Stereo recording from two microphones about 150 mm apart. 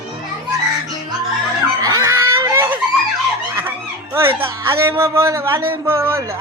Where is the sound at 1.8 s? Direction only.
20° right (ahead or behind).